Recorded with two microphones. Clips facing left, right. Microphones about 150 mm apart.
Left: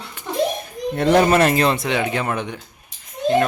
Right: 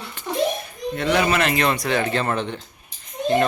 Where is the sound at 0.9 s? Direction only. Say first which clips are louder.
Left 5 dB; 50° left (ahead or behind).